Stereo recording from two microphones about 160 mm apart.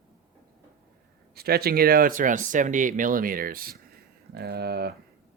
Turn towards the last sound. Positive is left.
turn(degrees=-85)